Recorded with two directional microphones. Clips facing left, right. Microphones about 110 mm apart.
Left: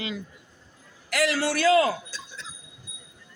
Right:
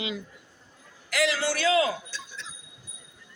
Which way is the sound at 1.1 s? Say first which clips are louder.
Left 2 dB; 50° left (ahead or behind).